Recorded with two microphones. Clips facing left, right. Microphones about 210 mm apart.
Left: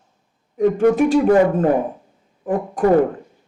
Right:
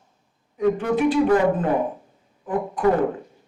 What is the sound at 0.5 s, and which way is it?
A woman's voice, 45° left (ahead or behind).